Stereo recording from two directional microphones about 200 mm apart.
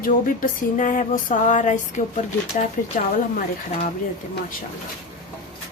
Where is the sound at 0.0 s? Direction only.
40° left (ahead or behind).